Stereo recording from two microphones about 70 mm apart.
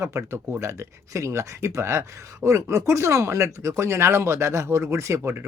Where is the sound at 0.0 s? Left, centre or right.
Right.